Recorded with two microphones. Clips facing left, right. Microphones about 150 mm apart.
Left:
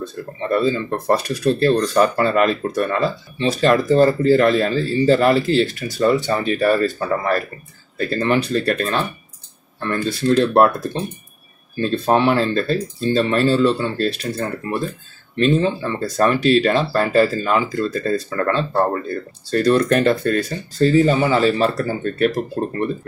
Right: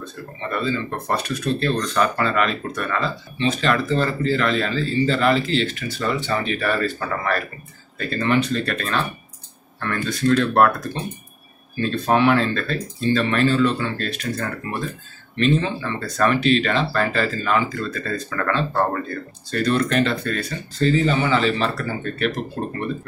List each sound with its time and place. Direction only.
0.0 s speech: 40° left (ahead or behind)
8.1 s speech: 35° left (ahead or behind)